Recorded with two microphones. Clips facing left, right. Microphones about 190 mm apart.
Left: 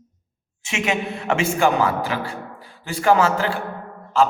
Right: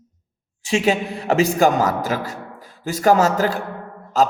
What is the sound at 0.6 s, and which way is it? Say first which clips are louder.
A man's voice: right 5 dB; 35° right (ahead or behind).